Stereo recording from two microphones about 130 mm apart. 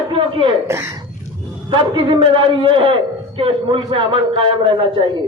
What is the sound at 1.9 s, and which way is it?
A man's voice, 35° right (ahead or behind).